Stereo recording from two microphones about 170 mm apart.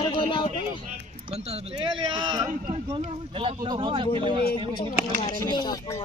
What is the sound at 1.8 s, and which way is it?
Speech, 25° right (ahead or behind).